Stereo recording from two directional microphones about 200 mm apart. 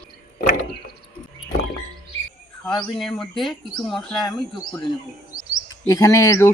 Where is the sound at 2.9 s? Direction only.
Centre (ahead or behind).